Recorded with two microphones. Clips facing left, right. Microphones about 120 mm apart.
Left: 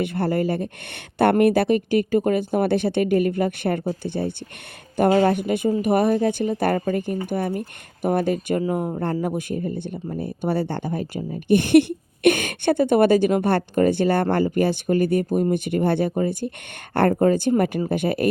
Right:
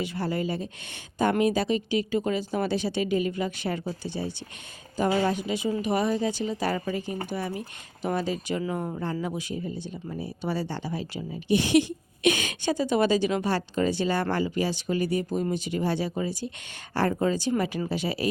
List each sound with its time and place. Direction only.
0.0 s speech: 55° left (ahead or behind)